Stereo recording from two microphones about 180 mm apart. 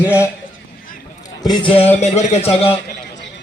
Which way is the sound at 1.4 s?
25° left (ahead or behind).